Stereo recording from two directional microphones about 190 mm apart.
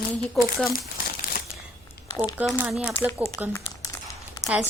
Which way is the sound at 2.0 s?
20° left (ahead or behind).